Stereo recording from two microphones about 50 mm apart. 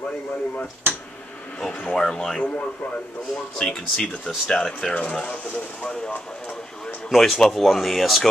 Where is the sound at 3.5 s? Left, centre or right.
Centre.